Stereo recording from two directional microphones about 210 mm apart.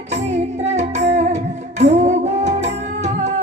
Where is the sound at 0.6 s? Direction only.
30° right (ahead or behind).